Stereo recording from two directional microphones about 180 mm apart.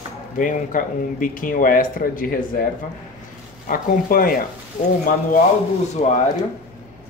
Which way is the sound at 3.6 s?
50° left (ahead or behind).